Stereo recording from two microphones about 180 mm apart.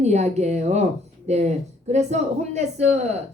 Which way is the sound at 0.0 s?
40° right (ahead or behind).